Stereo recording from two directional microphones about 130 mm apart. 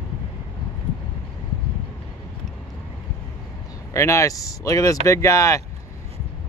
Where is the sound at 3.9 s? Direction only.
25° left (ahead or behind).